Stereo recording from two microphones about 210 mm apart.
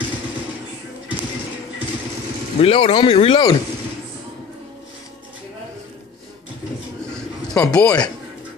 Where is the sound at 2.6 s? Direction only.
25° left (ahead or behind).